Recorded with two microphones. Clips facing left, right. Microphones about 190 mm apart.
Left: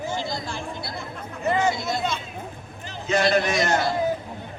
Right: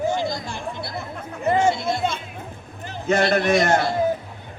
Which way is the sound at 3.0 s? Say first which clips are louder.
Right 2 dB; 55° right (ahead or behind).